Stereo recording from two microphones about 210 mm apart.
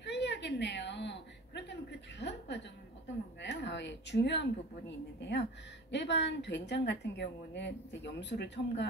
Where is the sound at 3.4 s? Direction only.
55° left (ahead or behind).